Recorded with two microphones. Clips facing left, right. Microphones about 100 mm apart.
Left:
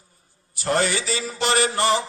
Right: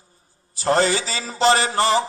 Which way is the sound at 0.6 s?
30° right (ahead or behind).